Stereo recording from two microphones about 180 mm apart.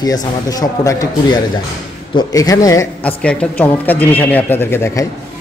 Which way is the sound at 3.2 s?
5° left (ahead or behind).